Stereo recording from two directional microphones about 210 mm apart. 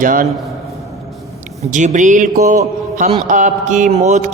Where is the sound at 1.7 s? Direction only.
35° right (ahead or behind).